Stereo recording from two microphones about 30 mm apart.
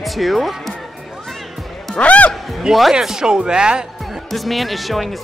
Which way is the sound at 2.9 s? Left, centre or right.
Right.